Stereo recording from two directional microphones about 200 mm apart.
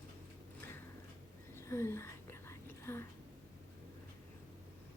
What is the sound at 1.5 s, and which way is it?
Whispering, 15° left (ahead or behind).